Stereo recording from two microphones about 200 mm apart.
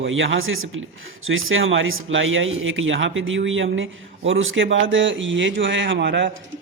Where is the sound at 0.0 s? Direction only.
70° right (ahead or behind).